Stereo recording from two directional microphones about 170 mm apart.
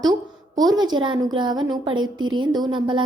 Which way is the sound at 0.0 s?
25° right (ahead or behind).